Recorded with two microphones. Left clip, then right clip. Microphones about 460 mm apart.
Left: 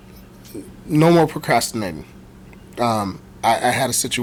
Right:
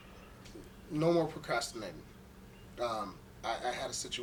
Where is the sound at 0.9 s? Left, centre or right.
Left.